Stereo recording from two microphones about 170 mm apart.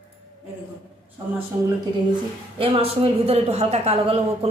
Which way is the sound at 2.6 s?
35° right (ahead or behind).